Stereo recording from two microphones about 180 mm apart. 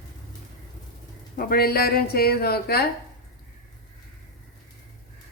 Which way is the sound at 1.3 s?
55° left (ahead or behind).